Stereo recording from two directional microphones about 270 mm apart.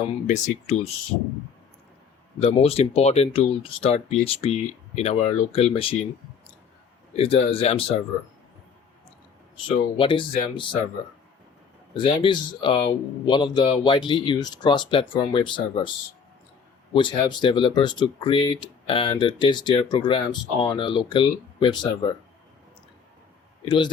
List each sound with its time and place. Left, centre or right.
0.3 s speech: left
2.4 s speech: left
7.2 s speech: left
10.0 s speech: centre
11.9 s speech: centre
23.6 s speech: centre